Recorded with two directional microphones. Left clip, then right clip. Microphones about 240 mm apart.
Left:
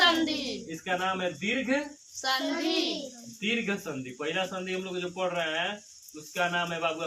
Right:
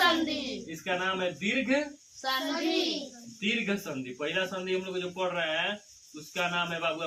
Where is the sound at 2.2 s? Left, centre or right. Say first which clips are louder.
Left 2 dB; left.